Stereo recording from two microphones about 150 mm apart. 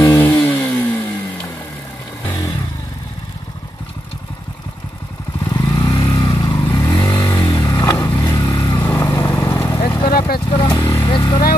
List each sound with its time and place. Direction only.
0.0 s vehicle: 15° left (ahead or behind)
5.5 s motorcycle: 25° left (ahead or behind)
7.0 s vehicle: 15° left (ahead or behind)
8.5 s vehicle: 30° left (ahead or behind)
8.7 s vehicle: 15° left (ahead or behind); by 10.1 s 30° left (ahead or behind)
10.1 s vehicle: 80° left
10.5 s vehicle: 40° left (ahead or behind)
10.8 s vehicle: 15° left (ahead or behind)
11.1 s vehicle: 30° left (ahead or behind)